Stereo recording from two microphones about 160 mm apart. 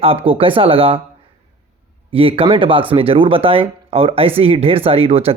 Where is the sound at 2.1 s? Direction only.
35° right (ahead or behind).